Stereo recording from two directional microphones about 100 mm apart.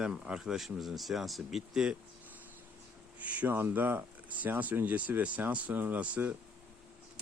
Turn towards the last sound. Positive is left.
turn(degrees=-15)  # may be behind; listen again after turning